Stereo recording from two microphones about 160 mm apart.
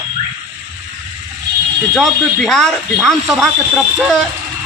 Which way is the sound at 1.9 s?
Centre (ahead or behind).